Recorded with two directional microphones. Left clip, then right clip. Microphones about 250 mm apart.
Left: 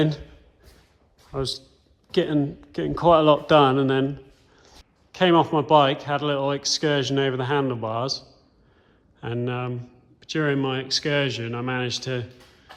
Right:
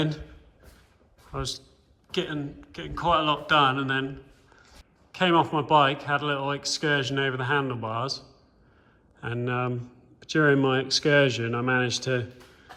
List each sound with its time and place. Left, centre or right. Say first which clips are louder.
1.3 s a man's voice: left 5 dB; centre
9.2 s speech: even; centre